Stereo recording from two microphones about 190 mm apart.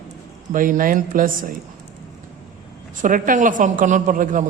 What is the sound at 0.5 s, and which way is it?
A man's voice, 45° right (ahead or behind).